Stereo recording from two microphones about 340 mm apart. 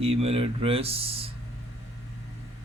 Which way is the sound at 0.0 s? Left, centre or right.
Centre.